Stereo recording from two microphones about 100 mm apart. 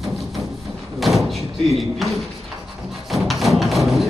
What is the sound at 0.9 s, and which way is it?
Thump, centre (ahead or behind).